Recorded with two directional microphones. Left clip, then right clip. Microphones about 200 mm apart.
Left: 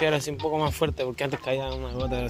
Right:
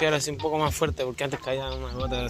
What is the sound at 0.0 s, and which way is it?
Speech, 25° left (ahead or behind).